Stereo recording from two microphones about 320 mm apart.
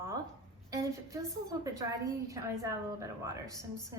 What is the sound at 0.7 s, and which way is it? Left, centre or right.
A woman's voice, centre.